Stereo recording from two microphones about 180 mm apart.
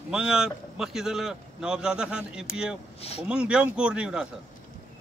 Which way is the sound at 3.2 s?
5° right (ahead or behind).